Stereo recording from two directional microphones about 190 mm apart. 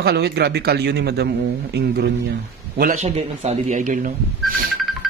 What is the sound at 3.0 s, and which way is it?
Speech, 35° right (ahead or behind).